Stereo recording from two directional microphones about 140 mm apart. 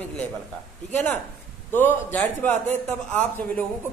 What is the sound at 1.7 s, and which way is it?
Speech, 15° left (ahead or behind).